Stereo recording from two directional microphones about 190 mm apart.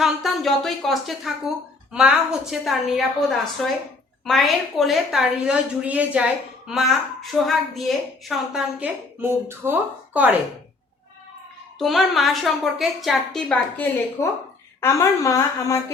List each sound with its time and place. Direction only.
0.0 s a woman's voice: centre (ahead or behind)
9.2 s speech: 10° right (ahead or behind)
11.8 s a woman's voice: centre (ahead or behind); by 15.8 s 15° left (ahead or behind)